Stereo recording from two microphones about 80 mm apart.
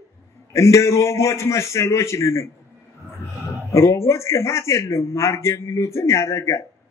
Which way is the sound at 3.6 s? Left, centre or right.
Left.